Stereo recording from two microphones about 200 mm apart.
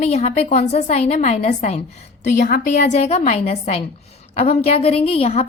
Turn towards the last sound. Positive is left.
turn(degrees=30)  # may be behind; listen again after turning